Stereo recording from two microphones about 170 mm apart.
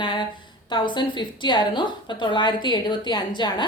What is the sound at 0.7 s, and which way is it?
A woman's voice, 30° left (ahead or behind).